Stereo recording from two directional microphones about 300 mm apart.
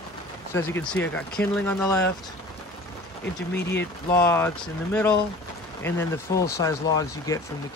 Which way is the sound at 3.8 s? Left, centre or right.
Centre.